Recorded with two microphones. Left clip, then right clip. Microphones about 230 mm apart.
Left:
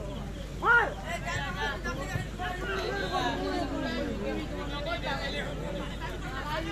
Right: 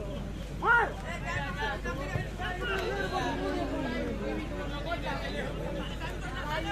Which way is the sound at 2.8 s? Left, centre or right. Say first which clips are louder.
Left 3 dB; left.